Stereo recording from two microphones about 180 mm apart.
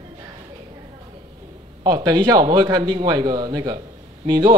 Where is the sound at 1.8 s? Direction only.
20° right (ahead or behind).